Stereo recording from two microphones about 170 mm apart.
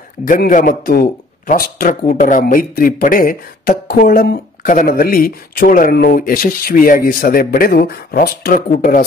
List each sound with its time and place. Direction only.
0.3 s a man's voice: 50° left (ahead or behind)